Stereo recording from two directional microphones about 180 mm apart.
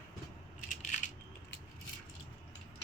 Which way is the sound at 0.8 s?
40° left (ahead or behind).